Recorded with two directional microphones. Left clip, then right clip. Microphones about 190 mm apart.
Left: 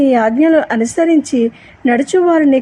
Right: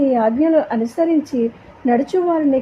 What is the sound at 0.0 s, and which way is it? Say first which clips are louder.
A woman's voice: left 4 dB; 15° left (ahead or behind).